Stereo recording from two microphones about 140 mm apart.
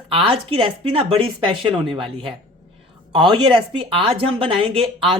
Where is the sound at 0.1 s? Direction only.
40° right (ahead or behind).